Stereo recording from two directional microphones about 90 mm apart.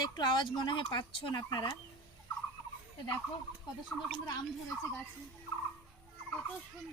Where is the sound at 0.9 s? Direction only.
65° left (ahead or behind).